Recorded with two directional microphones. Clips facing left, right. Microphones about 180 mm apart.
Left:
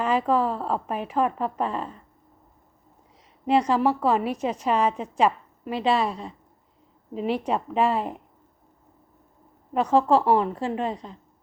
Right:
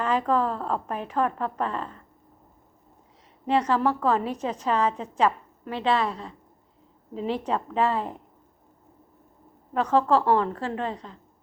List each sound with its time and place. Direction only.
0.0 s a woman's voice: 10° left (ahead or behind)
3.4 s a woman's voice: 15° left (ahead or behind)
9.7 s a woman's voice: 10° left (ahead or behind)